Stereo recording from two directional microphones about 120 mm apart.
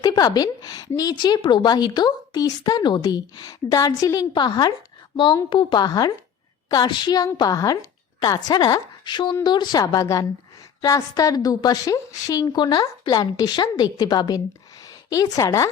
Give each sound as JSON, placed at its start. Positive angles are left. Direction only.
{"t": 0.0, "sound": "a woman's voice", "side_deg": 35}